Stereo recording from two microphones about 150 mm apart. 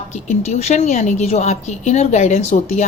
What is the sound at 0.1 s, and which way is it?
A woman's voice, 50° left (ahead or behind).